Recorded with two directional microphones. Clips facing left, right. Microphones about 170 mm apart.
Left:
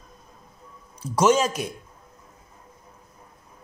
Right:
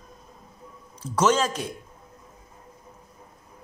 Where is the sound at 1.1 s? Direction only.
10° left (ahead or behind).